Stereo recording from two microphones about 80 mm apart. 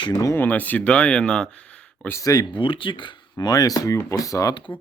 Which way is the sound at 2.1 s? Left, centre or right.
Left.